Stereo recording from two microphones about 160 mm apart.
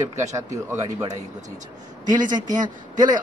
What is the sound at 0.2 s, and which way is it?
Speech, 20° right (ahead or behind).